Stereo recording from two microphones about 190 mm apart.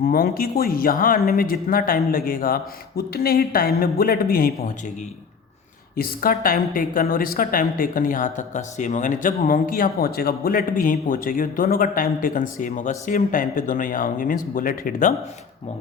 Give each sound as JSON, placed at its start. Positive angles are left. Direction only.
{"t": 0.0, "sound": "a woman's voice", "side_deg": 50}
{"t": 6.0, "sound": "a woman's voice", "side_deg": 50}